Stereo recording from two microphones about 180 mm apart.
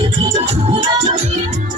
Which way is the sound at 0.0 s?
30° right (ahead or behind).